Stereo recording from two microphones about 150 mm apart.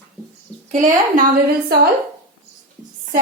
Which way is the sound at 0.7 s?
55° right (ahead or behind).